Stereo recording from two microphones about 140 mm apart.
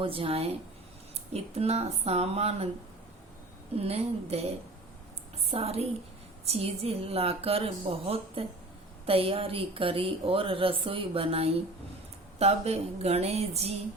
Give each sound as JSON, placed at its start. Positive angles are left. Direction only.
{"t": 0.0, "sound": "a woman's voice", "side_deg": -40}
{"t": 3.8, "sound": "a woman's voice", "side_deg": -45}